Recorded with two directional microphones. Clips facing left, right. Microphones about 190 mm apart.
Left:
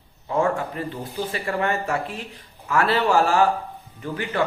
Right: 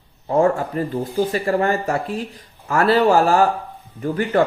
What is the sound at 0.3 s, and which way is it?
Speech, 40° right (ahead or behind).